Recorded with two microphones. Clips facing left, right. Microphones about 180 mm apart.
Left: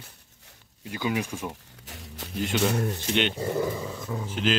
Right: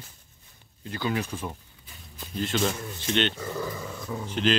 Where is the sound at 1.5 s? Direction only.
80° left.